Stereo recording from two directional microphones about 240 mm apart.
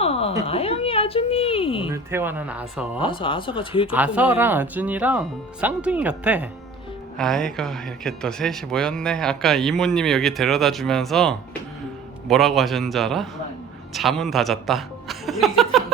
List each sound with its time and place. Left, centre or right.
0.0 s cat: left
0.4 s speech: left
1.9 s speech: centre
3.0 s speech: left
3.9 s speech: centre